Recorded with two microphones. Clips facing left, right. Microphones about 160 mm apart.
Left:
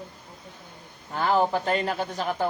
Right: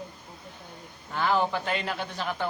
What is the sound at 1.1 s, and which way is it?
A man's voice, 40° left (ahead or behind).